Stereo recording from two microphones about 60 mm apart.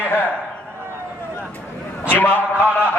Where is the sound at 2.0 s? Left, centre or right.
Left.